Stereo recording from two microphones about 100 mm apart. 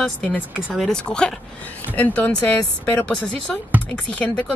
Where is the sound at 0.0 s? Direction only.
10° left (ahead or behind).